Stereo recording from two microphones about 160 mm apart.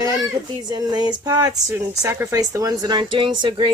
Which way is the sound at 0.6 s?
25° right (ahead or behind).